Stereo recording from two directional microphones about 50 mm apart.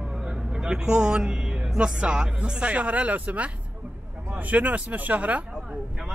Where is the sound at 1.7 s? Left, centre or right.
Centre.